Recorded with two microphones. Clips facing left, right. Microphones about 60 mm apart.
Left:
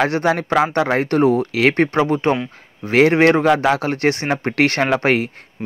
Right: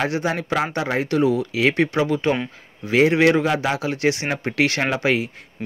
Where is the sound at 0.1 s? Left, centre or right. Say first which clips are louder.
Left 5 dB; left.